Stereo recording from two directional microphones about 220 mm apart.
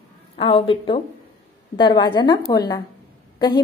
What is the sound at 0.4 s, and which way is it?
A woman's voice, 20° left (ahead or behind).